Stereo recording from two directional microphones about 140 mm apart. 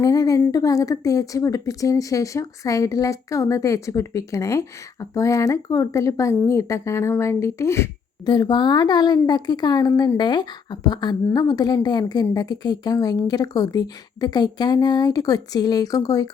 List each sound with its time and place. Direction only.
0.0 s a woman's voice: 25° left (ahead or behind)